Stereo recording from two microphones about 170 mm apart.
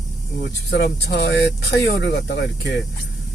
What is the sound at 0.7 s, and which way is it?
Speech, 75° left (ahead or behind).